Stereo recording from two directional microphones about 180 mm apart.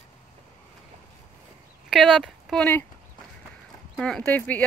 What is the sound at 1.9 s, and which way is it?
Speech, centre (ahead or behind).